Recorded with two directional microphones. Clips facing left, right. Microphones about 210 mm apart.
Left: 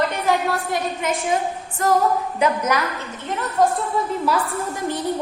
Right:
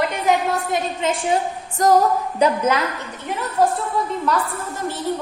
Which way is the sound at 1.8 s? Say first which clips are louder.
Right 3 dB; 40° right (ahead or behind).